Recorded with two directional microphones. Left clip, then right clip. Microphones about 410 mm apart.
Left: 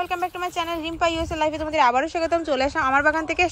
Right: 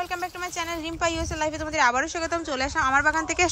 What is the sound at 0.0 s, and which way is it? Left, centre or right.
A woman's voice, centre.